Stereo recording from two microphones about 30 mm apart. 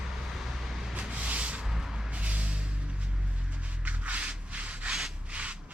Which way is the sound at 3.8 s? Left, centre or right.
Right.